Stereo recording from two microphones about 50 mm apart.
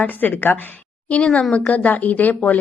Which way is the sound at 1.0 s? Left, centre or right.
Left.